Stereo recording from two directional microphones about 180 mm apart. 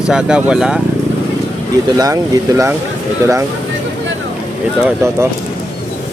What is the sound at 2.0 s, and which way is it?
Speech, 20° right (ahead or behind).